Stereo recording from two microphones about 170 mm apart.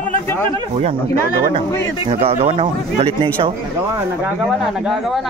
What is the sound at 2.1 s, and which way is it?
A man's voice, 35° right (ahead or behind).